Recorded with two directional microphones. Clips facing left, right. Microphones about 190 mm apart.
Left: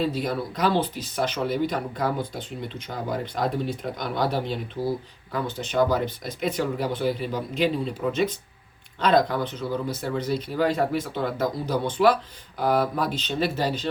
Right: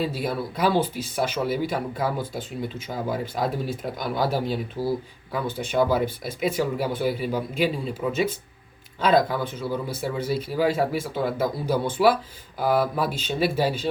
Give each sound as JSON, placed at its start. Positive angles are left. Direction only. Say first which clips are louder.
{"t": 0.0, "sound": "speech", "louder": "left 1 dB", "side_deg": -5}
{"t": 5.5, "sound": "speech", "louder": "right 3 dB", "side_deg": -55}
{"t": 5.7, "sound": "speech", "louder": "right 1 dB", "side_deg": -5}